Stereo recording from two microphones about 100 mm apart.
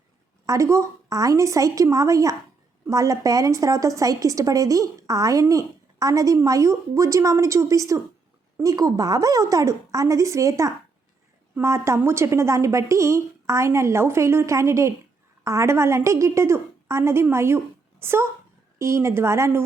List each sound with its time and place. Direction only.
0.4 s a woman's voice: 30° right (ahead or behind)